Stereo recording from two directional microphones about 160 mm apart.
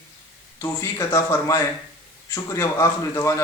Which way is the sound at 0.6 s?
20° left (ahead or behind).